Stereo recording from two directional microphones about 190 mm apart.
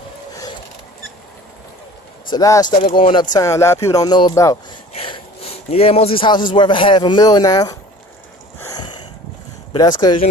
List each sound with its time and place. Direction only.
2.2 s speech: 20° left (ahead or behind)
3.3 s speech: 15° left (ahead or behind)
4.9 s a sound: 30° left (ahead or behind)
6.5 s speech: 25° left (ahead or behind)
8.5 s sniff: 20° left (ahead or behind)
9.7 s speech: 20° left (ahead or behind)